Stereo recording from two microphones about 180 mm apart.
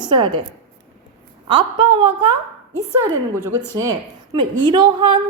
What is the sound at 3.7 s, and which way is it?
A woman's voice, 20° right (ahead or behind).